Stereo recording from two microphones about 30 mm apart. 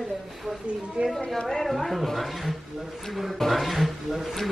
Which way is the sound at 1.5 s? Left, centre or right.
Centre.